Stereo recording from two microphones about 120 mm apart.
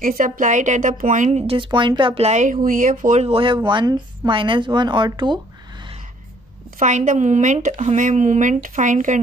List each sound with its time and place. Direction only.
0.2 s speech: 90° right
1.5 s speech: 45° right (ahead or behind)
2.2 s speech: 85° right
3.3 s speech: 45° right (ahead or behind)
6.8 s speech: 90° right